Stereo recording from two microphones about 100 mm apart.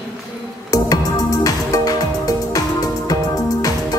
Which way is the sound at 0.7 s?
40° left (ahead or behind).